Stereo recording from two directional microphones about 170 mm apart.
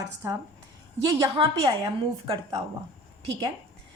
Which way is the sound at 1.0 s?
30° right (ahead or behind).